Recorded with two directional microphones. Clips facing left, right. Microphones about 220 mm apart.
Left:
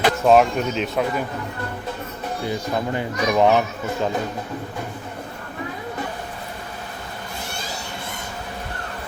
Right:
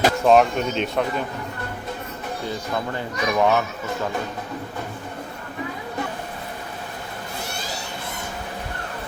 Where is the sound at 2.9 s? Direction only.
20° left (ahead or behind).